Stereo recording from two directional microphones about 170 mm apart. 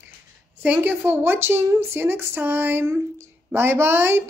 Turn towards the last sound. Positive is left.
turn(degrees=-15)  # may be behind; listen again after turning